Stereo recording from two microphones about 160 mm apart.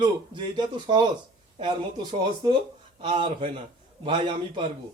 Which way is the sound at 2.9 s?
30° right (ahead or behind).